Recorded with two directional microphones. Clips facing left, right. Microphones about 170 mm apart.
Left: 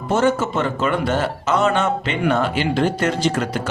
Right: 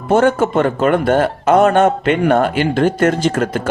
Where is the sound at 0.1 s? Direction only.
55° right (ahead or behind).